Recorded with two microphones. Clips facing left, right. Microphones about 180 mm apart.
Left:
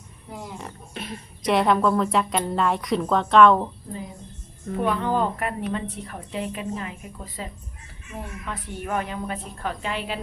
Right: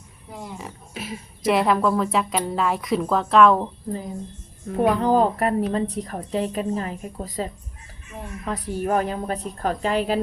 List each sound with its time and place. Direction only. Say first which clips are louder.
0.3 s a woman's voice: right 1 dB; centre (ahead or behind)
4.8 s a woman's voice: right 5 dB; 40° right (ahead or behind)